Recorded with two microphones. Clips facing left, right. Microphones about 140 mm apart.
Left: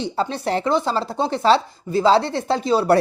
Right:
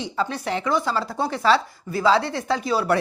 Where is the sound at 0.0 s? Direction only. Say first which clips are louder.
Left 3 dB; 30° left (ahead or behind).